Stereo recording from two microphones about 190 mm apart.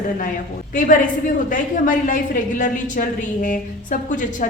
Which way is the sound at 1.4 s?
45° left (ahead or behind).